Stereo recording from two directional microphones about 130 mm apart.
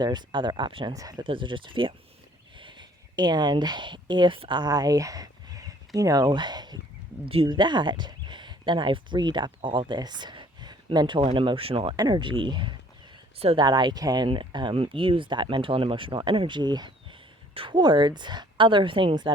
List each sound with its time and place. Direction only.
0.0 s speech: 35° right (ahead or behind)
1.2 s speech: 40° right (ahead or behind)
7.3 s speech: 45° right (ahead or behind)
11.9 s speech: 35° right (ahead or behind)
13.7 s speech: 35° right (ahead or behind)